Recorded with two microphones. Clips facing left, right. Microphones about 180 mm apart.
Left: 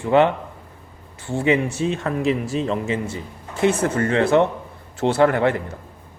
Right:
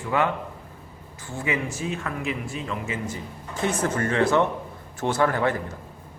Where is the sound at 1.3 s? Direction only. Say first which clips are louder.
Left 9 dB; 30° left (ahead or behind).